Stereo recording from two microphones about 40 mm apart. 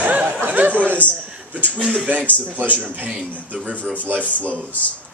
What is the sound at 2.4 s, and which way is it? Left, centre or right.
Speech, right.